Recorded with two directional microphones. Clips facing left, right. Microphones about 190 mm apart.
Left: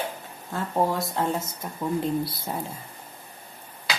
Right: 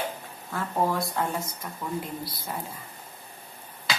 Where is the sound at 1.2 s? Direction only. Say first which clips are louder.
Left 3 dB; 25° left (ahead or behind).